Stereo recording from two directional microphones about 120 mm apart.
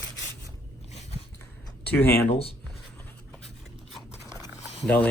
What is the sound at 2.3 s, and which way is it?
Speech, 55° left (ahead or behind).